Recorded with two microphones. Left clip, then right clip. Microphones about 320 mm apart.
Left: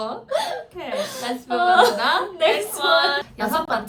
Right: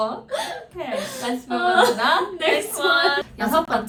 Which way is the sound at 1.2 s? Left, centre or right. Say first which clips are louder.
Left 2 dB; centre.